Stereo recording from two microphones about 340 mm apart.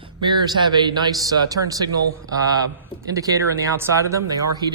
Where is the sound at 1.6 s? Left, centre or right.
Right.